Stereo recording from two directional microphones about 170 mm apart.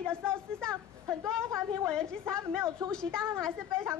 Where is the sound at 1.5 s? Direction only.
15° right (ahead or behind).